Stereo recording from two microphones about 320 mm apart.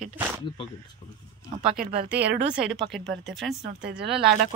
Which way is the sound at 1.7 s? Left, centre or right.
Right.